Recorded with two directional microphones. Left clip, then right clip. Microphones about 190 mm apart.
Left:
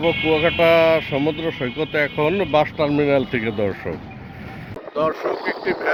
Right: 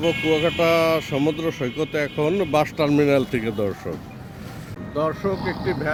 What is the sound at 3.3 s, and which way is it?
Speech, 10° right (ahead or behind).